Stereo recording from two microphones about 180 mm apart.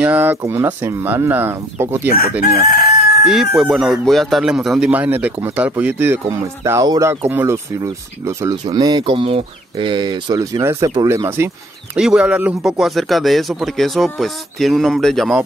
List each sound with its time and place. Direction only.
0.0 s speech: 10° right (ahead or behind)
2.7 s crowing: 60° left (ahead or behind)
3.3 s speech: centre (ahead or behind)